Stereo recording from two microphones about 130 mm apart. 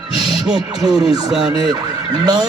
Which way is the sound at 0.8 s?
30° right (ahead or behind).